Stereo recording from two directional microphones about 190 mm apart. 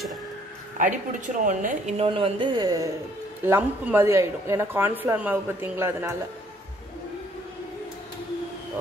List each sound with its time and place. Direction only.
0.7 s a woman's voice: 45° right (ahead or behind); by 6.1 s 10° right (ahead or behind)